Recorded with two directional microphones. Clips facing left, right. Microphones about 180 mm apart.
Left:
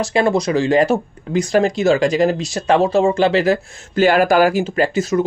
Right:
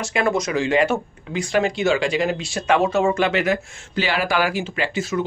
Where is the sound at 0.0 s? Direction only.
35° left (ahead or behind).